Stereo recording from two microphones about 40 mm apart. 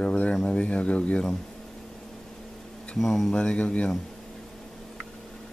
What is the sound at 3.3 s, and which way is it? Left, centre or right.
Speech, left.